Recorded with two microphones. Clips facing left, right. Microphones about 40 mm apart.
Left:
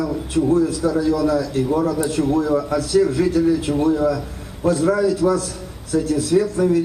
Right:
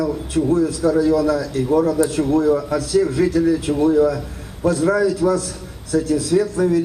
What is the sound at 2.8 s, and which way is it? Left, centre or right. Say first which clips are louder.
Speech: left 1 dB; left.